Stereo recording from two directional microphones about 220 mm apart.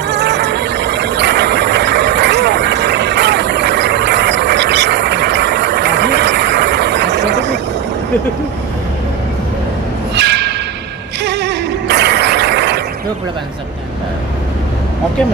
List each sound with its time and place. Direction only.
0.1 s vehicle: 50° right (ahead or behind)
10.1 s a sound: 50° right (ahead or behind)
11.2 s music: 50° right (ahead or behind)